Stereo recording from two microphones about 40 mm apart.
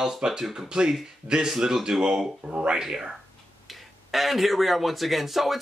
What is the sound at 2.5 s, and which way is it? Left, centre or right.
Speech, right.